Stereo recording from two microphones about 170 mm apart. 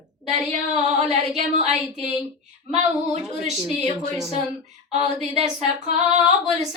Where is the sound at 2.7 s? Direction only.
40° right (ahead or behind).